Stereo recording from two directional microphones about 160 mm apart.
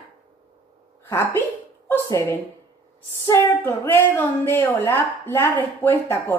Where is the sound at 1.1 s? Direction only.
15° left (ahead or behind).